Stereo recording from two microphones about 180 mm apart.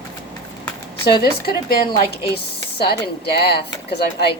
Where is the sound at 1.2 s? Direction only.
60° left (ahead or behind).